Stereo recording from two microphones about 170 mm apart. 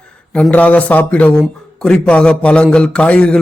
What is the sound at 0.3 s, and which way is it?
Speech, 5° left (ahead or behind).